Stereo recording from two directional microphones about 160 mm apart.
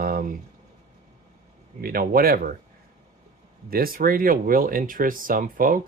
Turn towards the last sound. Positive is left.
turn(degrees=-60)  # may be behind; listen again after turning